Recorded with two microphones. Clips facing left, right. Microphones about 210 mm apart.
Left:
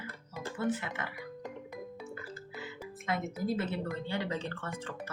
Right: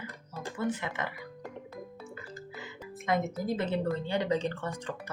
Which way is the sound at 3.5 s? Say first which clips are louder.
Right 4 dB; 15° right (ahead or behind).